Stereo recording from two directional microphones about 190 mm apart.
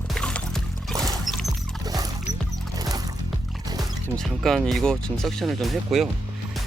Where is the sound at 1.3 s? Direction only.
Centre (ahead or behind).